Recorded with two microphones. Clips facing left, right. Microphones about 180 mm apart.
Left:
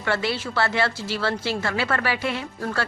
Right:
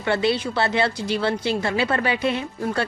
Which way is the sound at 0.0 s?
20° right (ahead or behind).